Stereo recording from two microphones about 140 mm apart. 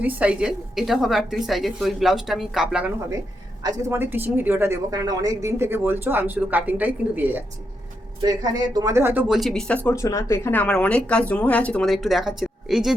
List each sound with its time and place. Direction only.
0.0 s a woman's voice: 10° right (ahead or behind)
3.6 s speech: 25° right (ahead or behind)
4.9 s speech: 25° right (ahead or behind)
8.2 s speech: 25° right (ahead or behind)
9.3 s a woman's voice: centre (ahead or behind)
9.9 s a woman's voice: 20° left (ahead or behind); by 13.0 s centre (ahead or behind)